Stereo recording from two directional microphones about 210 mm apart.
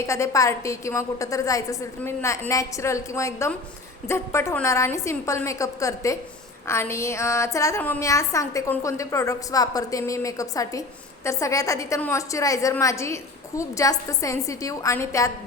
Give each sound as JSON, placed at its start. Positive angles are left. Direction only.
{"t": 0.0, "sound": "a woman's voice", "side_deg": 15}